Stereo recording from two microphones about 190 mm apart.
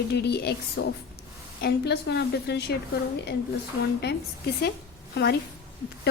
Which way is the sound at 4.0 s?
60° left (ahead or behind).